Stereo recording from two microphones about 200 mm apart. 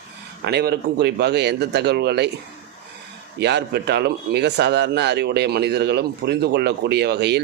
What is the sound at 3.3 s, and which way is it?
Speech, 60° right (ahead or behind).